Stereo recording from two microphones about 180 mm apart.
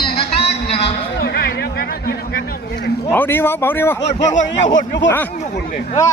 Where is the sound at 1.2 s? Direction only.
60° left (ahead or behind).